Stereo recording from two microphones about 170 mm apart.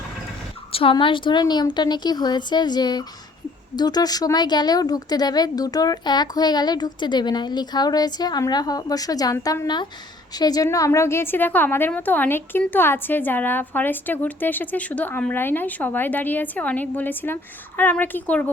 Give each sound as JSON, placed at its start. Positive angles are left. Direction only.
{"t": 0.7, "sound": "a woman's voice", "side_deg": 35}